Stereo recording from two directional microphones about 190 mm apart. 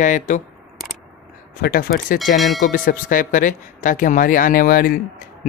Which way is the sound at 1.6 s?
50° left (ahead or behind).